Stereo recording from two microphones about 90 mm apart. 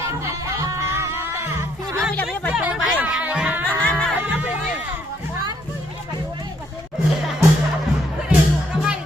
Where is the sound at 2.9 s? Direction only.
15° right (ahead or behind).